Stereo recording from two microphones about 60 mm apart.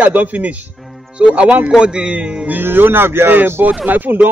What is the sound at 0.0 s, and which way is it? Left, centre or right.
Music, right.